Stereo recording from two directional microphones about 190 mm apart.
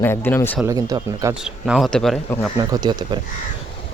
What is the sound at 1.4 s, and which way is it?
Speech, centre (ahead or behind).